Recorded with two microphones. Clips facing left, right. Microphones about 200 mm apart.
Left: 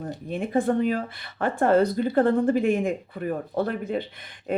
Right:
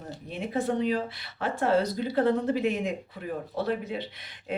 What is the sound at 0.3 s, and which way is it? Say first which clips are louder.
Speech: left 5 dB; 50° left (ahead or behind).